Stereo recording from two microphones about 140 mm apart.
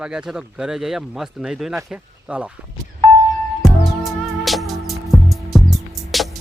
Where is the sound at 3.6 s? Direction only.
Centre (ahead or behind).